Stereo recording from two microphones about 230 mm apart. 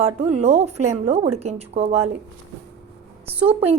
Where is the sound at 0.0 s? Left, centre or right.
Right.